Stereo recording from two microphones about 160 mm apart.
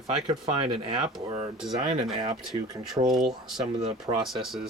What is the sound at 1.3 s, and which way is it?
Speech, 35° right (ahead or behind).